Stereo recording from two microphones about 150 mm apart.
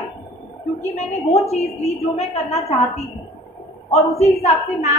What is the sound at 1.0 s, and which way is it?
A woman's voice, 45° left (ahead or behind).